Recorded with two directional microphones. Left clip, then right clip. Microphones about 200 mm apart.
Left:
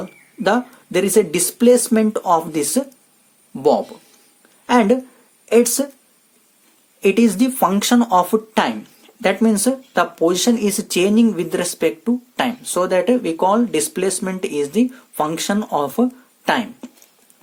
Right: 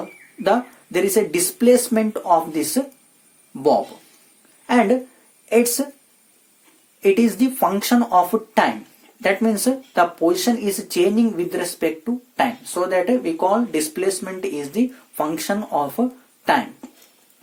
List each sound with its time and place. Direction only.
0.4 s a woman's voice: 30° left (ahead or behind)
7.0 s speech: 30° left (ahead or behind)